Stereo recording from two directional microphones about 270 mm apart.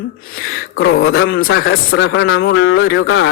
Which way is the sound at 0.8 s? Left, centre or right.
Left.